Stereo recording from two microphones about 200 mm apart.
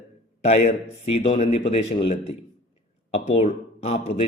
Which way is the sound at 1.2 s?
35° left (ahead or behind).